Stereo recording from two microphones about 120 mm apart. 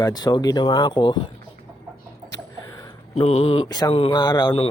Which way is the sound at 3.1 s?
60° left (ahead or behind).